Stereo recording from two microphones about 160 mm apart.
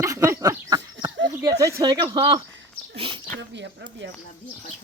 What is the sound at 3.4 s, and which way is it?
Speech, 90° right.